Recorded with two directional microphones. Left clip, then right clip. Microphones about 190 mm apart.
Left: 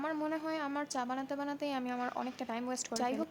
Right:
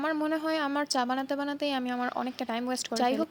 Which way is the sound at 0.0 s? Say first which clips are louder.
Right 7 dB; 30° right (ahead or behind).